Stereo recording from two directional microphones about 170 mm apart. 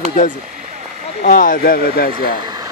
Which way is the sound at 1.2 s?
55° left (ahead or behind).